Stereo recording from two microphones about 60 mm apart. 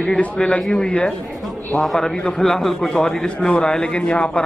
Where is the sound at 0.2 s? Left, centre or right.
Left.